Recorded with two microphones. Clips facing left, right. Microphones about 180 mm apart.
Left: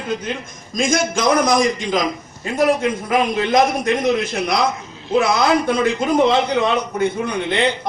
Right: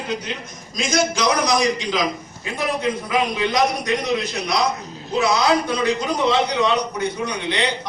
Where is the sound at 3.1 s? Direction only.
50° left (ahead or behind).